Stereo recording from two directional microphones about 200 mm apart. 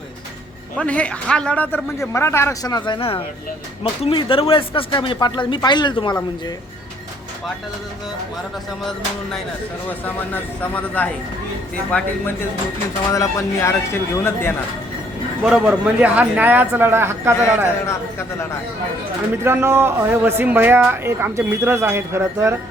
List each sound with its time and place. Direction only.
0.8 s a man's voice: 5° left (ahead or behind); by 6.1 s 20° left (ahead or behind)
8.8 s music: centre (ahead or behind)
10.1 s a man's voice: 10° left (ahead or behind)
15.4 s a man's voice: 5° right (ahead or behind)
17.8 s a man's voice: 15° left (ahead or behind)
19.5 s a man's voice: 10° right (ahead or behind)